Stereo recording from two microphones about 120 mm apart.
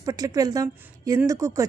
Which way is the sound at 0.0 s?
30° right (ahead or behind).